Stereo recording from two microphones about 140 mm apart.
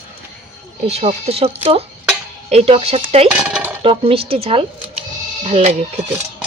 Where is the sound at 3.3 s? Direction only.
5° right (ahead or behind).